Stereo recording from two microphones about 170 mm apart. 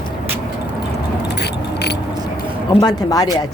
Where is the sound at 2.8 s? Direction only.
25° left (ahead or behind).